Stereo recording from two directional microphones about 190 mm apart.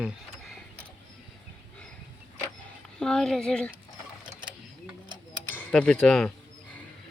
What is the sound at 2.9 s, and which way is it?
Speech, 5° left (ahead or behind).